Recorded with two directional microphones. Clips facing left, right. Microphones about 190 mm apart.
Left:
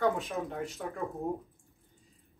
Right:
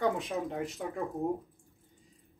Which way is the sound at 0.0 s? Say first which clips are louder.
Left 1 dB; 15° right (ahead or behind).